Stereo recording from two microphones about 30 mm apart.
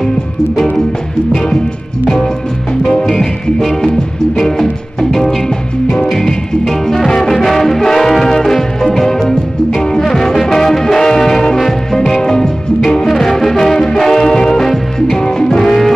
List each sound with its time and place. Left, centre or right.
3.1 s music: centre
6.6 s music: centre
13.0 s music: centre